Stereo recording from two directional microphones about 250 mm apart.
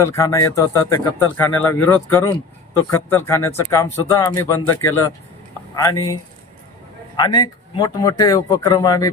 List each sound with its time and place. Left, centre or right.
0.0 s speech: centre
7.2 s speech: centre